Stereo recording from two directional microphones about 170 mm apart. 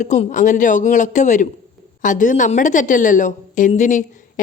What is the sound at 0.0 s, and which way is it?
A woman's voice, 45° left (ahead or behind).